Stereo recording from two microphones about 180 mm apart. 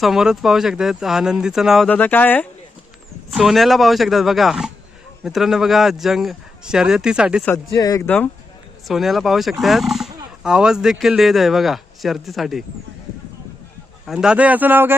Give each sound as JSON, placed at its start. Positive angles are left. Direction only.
{"t": 0.0, "sound": "speech", "side_deg": 0}
{"t": 3.3, "sound": "speech", "side_deg": 0}
{"t": 7.4, "sound": "speech", "side_deg": 15}
{"t": 8.9, "sound": "speech", "side_deg": 0}
{"t": 14.1, "sound": "a man's voice", "side_deg": -5}